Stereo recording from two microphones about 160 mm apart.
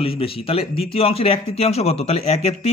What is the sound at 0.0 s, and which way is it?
A man's voice, 35° left (ahead or behind).